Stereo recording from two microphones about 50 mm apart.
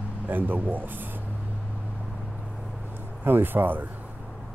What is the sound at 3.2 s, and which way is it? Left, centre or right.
Speech, right.